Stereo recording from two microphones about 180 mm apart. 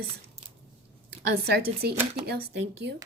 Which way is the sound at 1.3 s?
65° right (ahead or behind).